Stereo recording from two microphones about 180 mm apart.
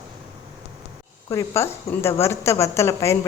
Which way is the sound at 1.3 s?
15° left (ahead or behind).